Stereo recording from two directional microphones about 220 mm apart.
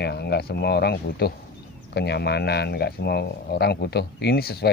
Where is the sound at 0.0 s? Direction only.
50° left (ahead or behind).